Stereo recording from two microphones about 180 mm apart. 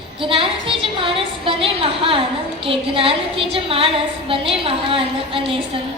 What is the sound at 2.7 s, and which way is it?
A woman's voice, 30° right (ahead or behind).